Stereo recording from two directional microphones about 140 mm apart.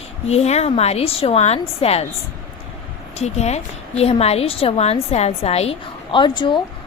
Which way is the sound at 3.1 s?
50° left (ahead or behind).